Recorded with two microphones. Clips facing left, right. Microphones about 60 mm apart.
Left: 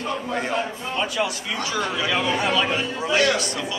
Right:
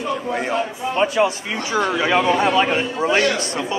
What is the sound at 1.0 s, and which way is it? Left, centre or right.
A man's voice, right.